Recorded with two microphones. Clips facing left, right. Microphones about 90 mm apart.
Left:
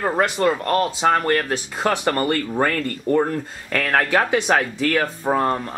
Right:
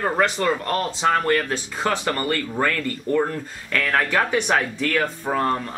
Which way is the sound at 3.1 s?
35° left (ahead or behind).